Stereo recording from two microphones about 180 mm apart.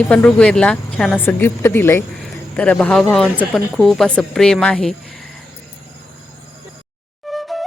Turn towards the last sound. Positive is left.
turn(degrees=0)  # may be behind; listen again after turning